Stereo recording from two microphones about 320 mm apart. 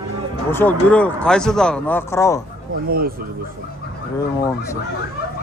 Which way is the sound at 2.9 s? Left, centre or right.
Right.